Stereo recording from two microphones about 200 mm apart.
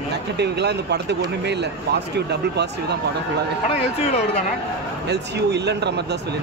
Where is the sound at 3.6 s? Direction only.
30° left (ahead or behind).